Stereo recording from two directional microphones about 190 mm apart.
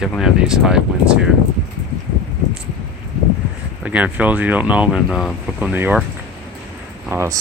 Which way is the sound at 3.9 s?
10° right (ahead or behind).